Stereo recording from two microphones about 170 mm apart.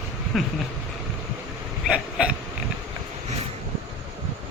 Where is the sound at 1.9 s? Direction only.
5° right (ahead or behind).